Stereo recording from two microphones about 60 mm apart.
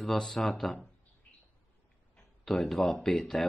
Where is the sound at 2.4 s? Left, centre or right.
Centre.